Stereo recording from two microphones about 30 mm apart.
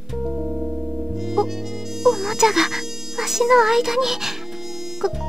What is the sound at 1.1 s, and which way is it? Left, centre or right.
Music, centre.